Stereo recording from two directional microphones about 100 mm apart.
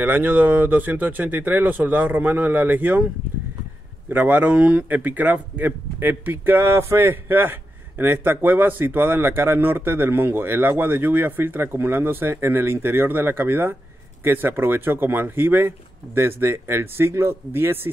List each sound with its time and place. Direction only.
0.0 s speech: 20° right (ahead or behind)
4.1 s speech: 15° right (ahead or behind)